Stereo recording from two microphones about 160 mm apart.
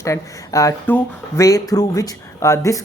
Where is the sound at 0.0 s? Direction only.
20° left (ahead or behind).